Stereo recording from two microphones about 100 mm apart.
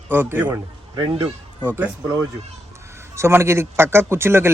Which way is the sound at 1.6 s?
20° right (ahead or behind).